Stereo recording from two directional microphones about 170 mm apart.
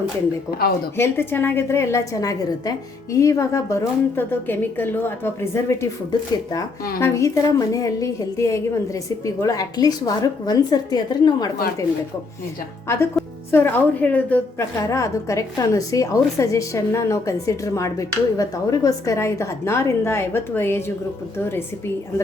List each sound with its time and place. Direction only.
0.9 s a woman's voice: 15° left (ahead or behind)
13.2 s music: centre (ahead or behind)
13.5 s a woman's voice: 15° left (ahead or behind)